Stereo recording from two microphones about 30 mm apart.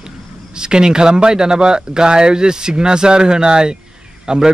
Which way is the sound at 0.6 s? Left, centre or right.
Right.